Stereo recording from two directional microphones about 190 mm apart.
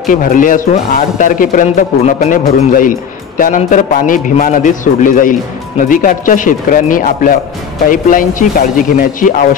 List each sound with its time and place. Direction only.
0.1 s speech: 45° left (ahead or behind)